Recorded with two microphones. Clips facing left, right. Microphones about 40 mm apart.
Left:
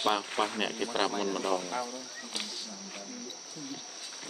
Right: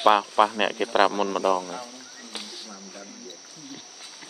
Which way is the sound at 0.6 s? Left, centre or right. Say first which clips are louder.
Right 9 dB; right.